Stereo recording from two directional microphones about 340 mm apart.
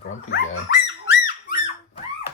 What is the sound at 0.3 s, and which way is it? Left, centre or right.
Dog, left.